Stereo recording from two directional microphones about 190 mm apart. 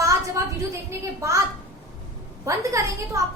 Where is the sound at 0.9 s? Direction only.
15° right (ahead or behind).